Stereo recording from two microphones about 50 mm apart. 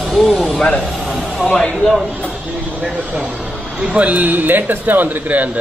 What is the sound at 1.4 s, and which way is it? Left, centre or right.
Speech, left.